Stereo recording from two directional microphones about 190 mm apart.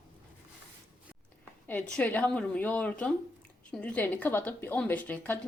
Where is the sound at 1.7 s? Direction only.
5° left (ahead or behind).